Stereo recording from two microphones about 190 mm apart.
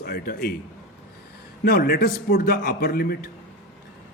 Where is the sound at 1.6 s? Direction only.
55° left (ahead or behind).